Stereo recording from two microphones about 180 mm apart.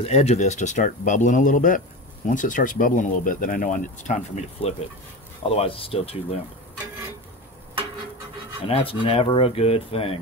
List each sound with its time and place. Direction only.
0.0 s speech: 35° left (ahead or behind)
8.6 s speech: 30° left (ahead or behind)